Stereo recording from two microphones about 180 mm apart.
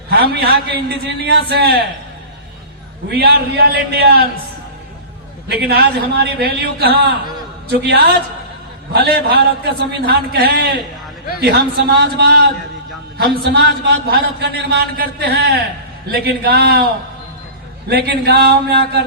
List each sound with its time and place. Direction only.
0.1 s a man's voice: 60° right (ahead or behind)
3.1 s a man's voice: 60° right (ahead or behind)
5.6 s a man's voice: 65° right (ahead or behind)
17.8 s a man's voice: 65° right (ahead or behind)